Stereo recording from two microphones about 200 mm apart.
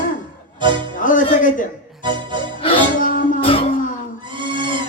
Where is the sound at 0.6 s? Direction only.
25° right (ahead or behind).